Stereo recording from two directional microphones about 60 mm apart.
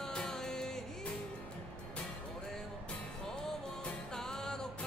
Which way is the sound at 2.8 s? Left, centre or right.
Centre.